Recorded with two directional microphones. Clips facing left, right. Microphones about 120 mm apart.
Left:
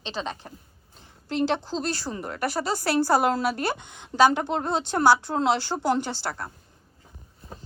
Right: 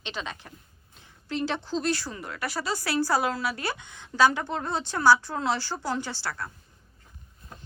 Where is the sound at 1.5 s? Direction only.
30° left (ahead or behind).